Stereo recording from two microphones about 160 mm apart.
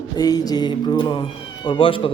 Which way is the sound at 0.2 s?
25° left (ahead or behind).